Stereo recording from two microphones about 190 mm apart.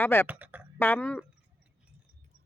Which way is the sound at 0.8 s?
10° left (ahead or behind).